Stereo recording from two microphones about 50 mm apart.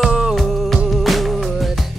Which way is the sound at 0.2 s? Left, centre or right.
Centre.